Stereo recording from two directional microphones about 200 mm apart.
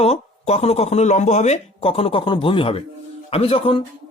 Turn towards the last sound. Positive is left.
turn(degrees=25)  # may be behind; listen again after turning